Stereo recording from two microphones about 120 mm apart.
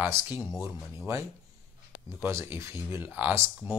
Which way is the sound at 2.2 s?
20° right (ahead or behind).